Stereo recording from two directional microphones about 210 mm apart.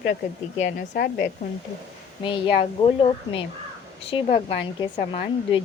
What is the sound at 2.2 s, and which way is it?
Speech, 25° left (ahead or behind).